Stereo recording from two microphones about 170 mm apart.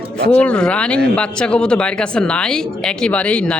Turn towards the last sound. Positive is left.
turn(degrees=5)  # may be behind; listen again after turning